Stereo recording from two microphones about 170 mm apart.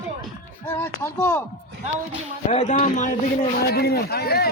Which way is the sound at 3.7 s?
75° left (ahead or behind).